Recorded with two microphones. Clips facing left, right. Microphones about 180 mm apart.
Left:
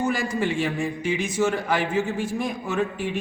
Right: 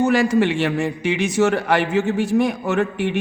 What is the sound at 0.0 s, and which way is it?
A man's voice, 75° right (ahead or behind).